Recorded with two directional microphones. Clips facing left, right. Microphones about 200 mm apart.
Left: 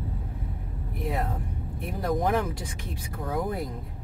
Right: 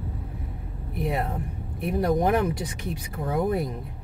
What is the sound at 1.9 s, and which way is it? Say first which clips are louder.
Speech: right 4 dB; 20° right (ahead or behind).